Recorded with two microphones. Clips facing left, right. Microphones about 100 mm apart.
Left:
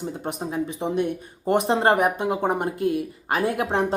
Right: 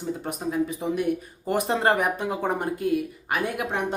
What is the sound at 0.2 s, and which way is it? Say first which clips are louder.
Speech: even; 20° left (ahead or behind).